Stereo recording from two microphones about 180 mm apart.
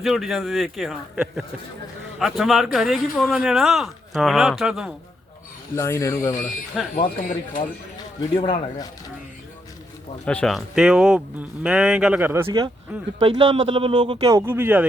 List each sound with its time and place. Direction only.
0.0 s a man's voice: centre (ahead or behind)
5.7 s speech: 15° left (ahead or behind)
7.0 s speech: 45° left (ahead or behind)
8.3 s speech: 30° left (ahead or behind)
10.2 s a man's voice: 5° left (ahead or behind); by 12.6 s 15° right (ahead or behind)
13.1 s speech: 30° right (ahead or behind); by 14.8 s 10° right (ahead or behind)